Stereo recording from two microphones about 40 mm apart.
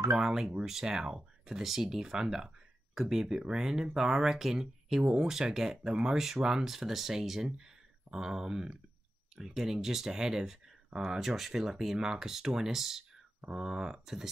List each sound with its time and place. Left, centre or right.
0.2 s speech: centre
11.1 s speech: centre